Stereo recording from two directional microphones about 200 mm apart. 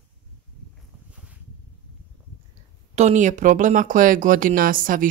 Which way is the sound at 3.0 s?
35° right (ahead or behind).